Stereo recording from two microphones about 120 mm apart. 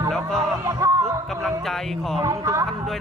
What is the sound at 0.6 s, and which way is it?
Music, 25° right (ahead or behind).